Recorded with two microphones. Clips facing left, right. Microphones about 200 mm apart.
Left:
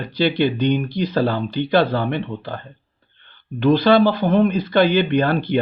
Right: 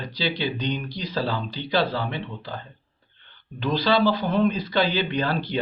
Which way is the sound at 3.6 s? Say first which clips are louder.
Left 7 dB; 60° left (ahead or behind).